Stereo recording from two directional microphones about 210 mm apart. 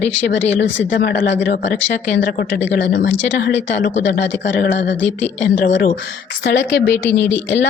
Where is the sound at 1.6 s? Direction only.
55° left (ahead or behind).